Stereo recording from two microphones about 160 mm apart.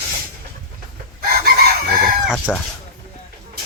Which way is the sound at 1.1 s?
75° right (ahead or behind).